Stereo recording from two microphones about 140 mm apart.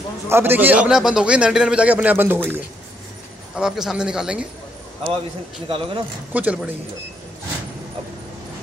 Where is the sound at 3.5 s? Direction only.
5° right (ahead or behind).